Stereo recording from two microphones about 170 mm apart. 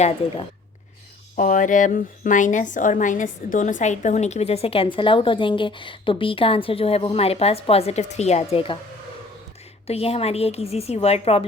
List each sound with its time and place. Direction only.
1.4 s a woman's voice: 50° left (ahead or behind); by 8.8 s 30° left (ahead or behind)
9.8 s a woman's voice: 35° left (ahead or behind)